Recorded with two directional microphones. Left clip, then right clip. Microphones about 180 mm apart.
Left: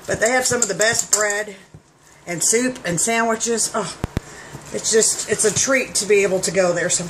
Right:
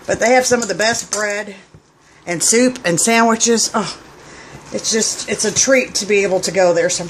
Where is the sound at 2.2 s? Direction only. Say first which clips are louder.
Right 5 dB; 45° right (ahead or behind).